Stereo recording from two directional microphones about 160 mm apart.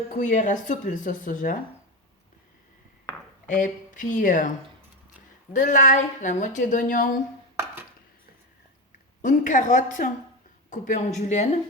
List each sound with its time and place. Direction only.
0.1 s a woman's voice: 55° left (ahead or behind)
3.4 s speech: 55° left (ahead or behind)
5.5 s a woman's voice: 50° left (ahead or behind)
9.2 s a woman's voice: 50° left (ahead or behind)